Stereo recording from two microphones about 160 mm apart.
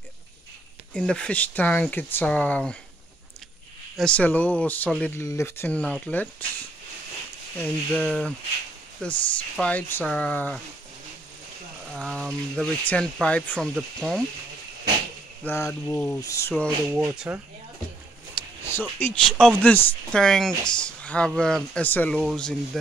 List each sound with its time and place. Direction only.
0.9 s speech: 5° left (ahead or behind)
3.9 s speech: 5° left (ahead or behind)
7.5 s speech: 5° left (ahead or behind)
11.9 s speech: 5° left (ahead or behind)
15.4 s speech: 15° left (ahead or behind)
16.9 s speech: 10° right (ahead or behind)
18.7 s speech: 15° left (ahead or behind)